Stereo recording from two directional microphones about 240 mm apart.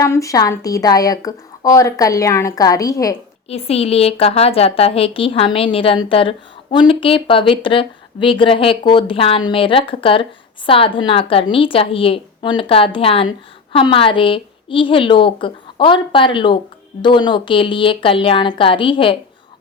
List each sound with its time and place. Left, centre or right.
0.0 s a woman's voice: centre